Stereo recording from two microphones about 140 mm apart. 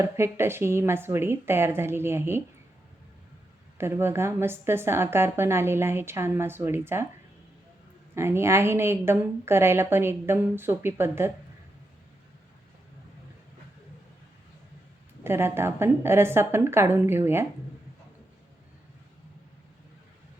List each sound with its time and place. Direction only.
0.0 s a woman's voice: 20° right (ahead or behind)
3.8 s a woman's voice: 15° right (ahead or behind)
8.1 s a woman's voice: 20° right (ahead or behind)
15.2 s a woman's voice: 15° right (ahead or behind)